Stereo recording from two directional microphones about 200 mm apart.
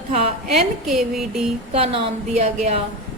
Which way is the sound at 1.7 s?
30° right (ahead or behind).